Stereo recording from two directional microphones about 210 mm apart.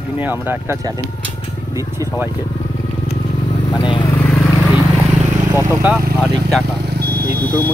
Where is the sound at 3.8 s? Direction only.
20° left (ahead or behind).